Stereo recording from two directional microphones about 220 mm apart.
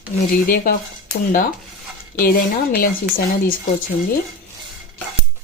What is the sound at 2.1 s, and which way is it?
Speech, 40° left (ahead or behind).